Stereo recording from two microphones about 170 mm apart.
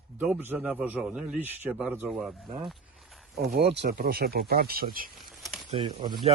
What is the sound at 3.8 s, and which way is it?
Speech, 60° right (ahead or behind).